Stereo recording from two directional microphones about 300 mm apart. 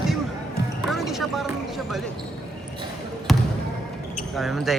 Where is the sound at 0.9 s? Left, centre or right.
Centre.